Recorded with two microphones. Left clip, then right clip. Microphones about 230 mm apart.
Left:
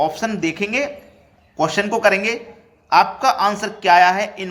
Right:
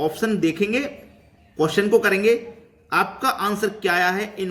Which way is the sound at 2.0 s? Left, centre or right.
Centre.